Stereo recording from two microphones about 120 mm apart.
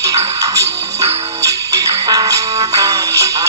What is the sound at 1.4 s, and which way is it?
Music, 30° right (ahead or behind).